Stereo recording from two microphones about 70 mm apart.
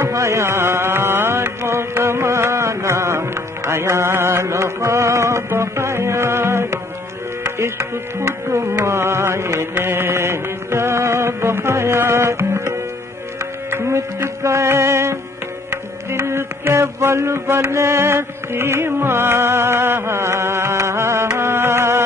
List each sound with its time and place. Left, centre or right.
0.0 s music: right